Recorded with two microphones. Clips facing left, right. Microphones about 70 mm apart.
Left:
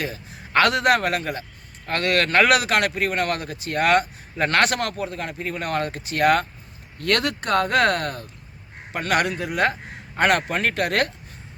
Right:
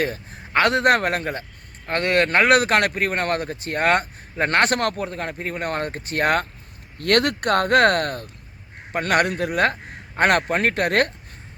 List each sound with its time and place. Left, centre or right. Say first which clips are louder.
0.0 s speech: right 5 dB; right
0.5 s speech: even; right
0.9 s speech: right 1 dB; right
2.6 s speech: right 2 dB; right
4.8 s speech: right 2 dB; right
7.0 s speech: right 3 dB; right